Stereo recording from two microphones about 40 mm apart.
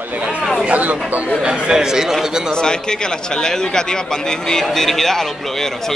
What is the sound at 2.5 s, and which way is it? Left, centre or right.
A man's voice, centre.